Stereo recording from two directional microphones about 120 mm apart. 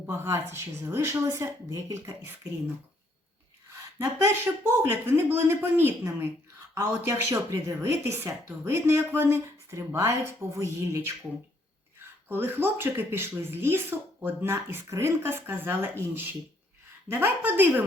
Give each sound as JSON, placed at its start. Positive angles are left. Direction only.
{"t": 0.1, "sound": "speech", "side_deg": -20}
{"t": 3.7, "sound": "speech", "side_deg": -20}
{"t": 12.3, "sound": "a woman's voice", "side_deg": -20}